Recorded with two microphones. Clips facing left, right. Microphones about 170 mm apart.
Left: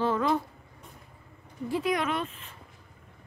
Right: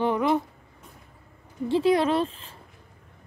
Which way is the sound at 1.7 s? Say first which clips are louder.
Right 7 dB; 30° right (ahead or behind).